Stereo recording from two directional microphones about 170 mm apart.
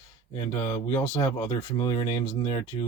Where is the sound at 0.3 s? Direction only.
20° left (ahead or behind).